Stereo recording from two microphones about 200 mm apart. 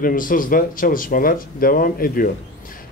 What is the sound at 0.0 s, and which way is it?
A man's voice, 45° left (ahead or behind).